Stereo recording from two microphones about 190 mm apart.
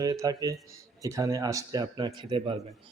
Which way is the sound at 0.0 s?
20° right (ahead or behind).